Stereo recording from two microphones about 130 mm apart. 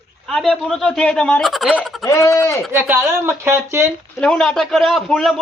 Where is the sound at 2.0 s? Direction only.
25° left (ahead or behind).